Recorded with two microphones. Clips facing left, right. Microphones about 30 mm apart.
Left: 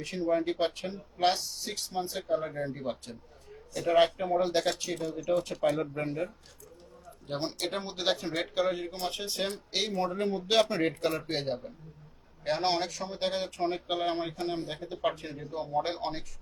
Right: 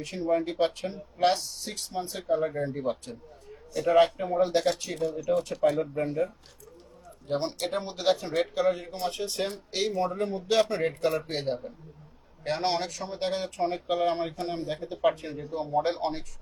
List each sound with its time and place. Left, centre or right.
0.0 s speech: centre
3.7 s a man's voice: centre
3.9 s speech: centre
10.2 s speech: left
11.1 s speech: centre
14.7 s speech: centre